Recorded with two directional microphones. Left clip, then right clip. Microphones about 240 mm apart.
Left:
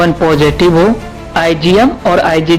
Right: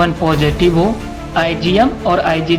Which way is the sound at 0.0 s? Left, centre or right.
Left.